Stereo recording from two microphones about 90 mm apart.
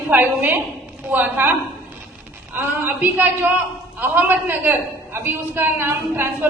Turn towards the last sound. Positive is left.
turn(degrees=-25)  # may be behind; listen again after turning